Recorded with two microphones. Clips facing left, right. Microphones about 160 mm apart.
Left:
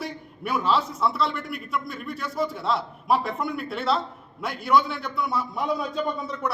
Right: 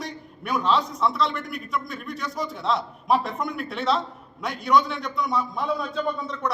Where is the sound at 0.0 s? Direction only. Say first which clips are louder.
Left 2 dB; 5° left (ahead or behind).